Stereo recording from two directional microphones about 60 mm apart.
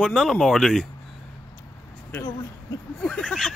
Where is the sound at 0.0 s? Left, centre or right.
Centre.